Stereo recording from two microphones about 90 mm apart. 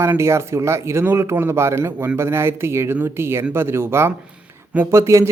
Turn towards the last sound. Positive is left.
turn(degrees=-30)  # may be behind; listen again after turning